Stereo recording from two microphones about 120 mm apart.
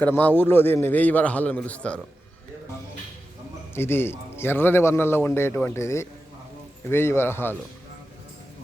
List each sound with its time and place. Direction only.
0.0 s a man's voice: 15° left (ahead or behind)
3.8 s speech: 20° left (ahead or behind)